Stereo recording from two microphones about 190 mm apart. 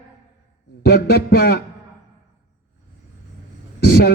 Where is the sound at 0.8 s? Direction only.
55° left (ahead or behind).